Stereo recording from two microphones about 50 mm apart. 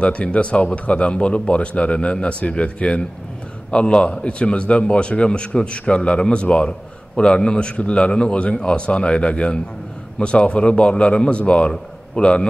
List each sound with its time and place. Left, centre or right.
0.0 s a man's voice: left